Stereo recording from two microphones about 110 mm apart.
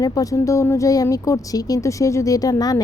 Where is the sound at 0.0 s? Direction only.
35° left (ahead or behind).